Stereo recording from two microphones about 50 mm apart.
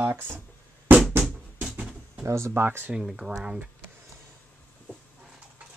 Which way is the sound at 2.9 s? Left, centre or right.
Centre.